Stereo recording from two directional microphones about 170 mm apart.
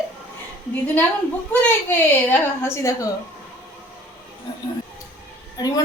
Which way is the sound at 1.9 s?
15° left (ahead or behind).